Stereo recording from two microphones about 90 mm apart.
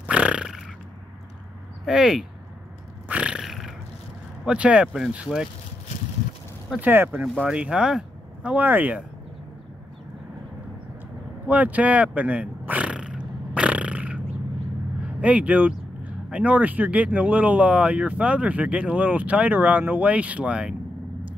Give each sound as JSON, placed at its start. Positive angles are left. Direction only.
{"t": 0.0, "sound": "a sound", "side_deg": -15}
{"t": 1.9, "sound": "speech", "side_deg": -5}
{"t": 3.1, "sound": "roar", "side_deg": -10}
{"t": 4.5, "sound": "speech", "side_deg": -15}
{"t": 6.8, "sound": "speech", "side_deg": -20}
{"t": 7.4, "sound": "speech", "side_deg": -10}
{"t": 11.4, "sound": "a sound", "side_deg": -15}
{"t": 15.1, "sound": "speech", "side_deg": -15}